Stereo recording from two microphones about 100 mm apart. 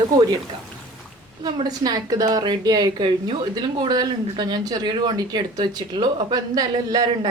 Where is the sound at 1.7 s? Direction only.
40° right (ahead or behind).